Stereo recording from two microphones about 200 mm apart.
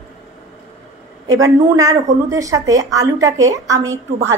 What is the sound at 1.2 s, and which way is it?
A woman's voice, 15° right (ahead or behind).